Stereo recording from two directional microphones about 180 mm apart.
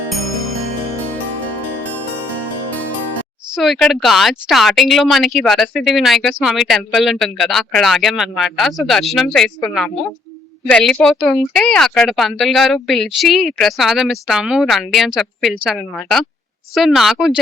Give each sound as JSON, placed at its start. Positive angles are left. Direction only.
{"t": 3.5, "sound": "speech", "side_deg": 0}